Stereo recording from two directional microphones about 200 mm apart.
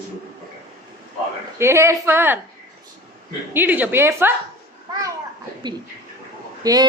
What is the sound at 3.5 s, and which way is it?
Speech, 10° right (ahead or behind).